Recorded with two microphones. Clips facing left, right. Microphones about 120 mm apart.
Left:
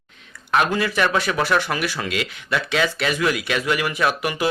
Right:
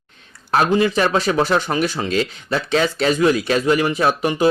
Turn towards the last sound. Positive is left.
turn(degrees=-30)  # may be behind; listen again after turning